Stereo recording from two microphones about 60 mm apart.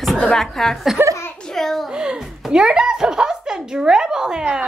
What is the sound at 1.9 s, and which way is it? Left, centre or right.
A child's voice, centre.